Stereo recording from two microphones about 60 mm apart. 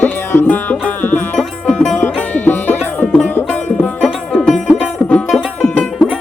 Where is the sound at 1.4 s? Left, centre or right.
Centre.